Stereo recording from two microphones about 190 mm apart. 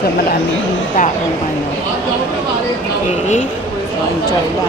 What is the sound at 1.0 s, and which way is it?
Speech, 45° left (ahead or behind).